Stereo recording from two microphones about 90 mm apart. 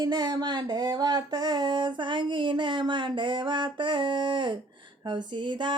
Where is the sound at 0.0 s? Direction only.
50° right (ahead or behind).